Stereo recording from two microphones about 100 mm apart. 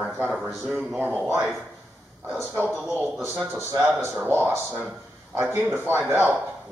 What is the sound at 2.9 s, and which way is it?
A man's voice, 20° right (ahead or behind).